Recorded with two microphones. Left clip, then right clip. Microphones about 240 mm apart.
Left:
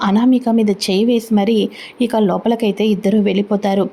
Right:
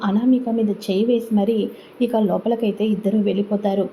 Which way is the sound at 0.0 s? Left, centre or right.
Left.